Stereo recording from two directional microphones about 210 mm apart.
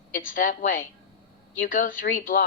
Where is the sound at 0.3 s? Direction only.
40° left (ahead or behind).